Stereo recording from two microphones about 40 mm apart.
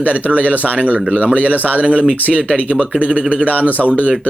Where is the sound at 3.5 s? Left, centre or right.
Right.